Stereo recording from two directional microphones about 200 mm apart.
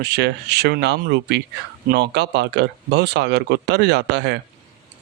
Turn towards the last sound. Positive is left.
turn(degrees=-60)  # may be behind; listen again after turning